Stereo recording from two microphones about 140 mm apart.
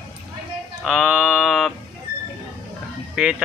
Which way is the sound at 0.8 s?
5° right (ahead or behind).